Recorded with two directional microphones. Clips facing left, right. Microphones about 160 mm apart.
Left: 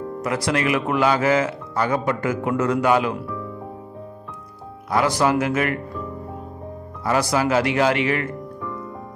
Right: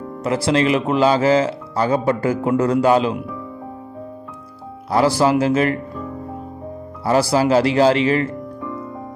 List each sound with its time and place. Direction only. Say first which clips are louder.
0.2 s speech: right 5 dB; 25° right (ahead or behind)
4.9 s speech: right 4 dB; 30° right (ahead or behind)
7.1 s speech: right 4 dB; 30° right (ahead or behind)